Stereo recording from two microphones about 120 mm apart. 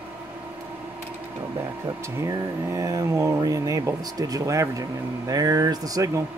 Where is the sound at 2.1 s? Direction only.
25° right (ahead or behind).